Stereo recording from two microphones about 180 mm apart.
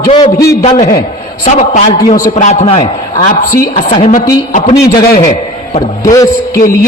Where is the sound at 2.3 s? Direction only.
40° left (ahead or behind); by 3.6 s 25° left (ahead or behind).